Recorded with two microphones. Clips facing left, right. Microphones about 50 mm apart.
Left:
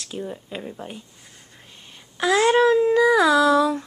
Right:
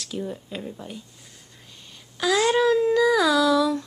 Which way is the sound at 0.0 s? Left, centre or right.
Centre.